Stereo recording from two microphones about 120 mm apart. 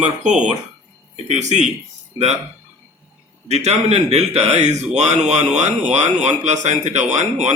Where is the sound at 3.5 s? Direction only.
70° right (ahead or behind).